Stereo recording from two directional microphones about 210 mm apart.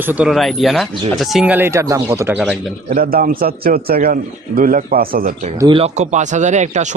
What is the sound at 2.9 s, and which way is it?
A man's voice, 45° right (ahead or behind).